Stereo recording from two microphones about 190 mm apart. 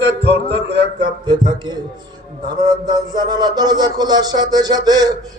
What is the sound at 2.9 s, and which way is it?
A man's voice, 20° right (ahead or behind).